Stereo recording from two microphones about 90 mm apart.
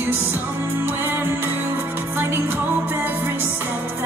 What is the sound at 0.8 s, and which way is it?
Music, 20° right (ahead or behind).